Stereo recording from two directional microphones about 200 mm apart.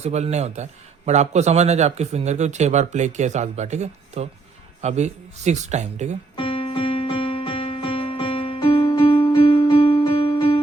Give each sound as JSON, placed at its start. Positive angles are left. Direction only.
{"t": 0.0, "sound": "a man's voice", "side_deg": -35}
{"t": 6.3, "sound": "music", "side_deg": 25}